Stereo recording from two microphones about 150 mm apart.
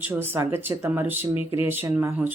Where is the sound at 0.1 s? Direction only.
15° right (ahead or behind).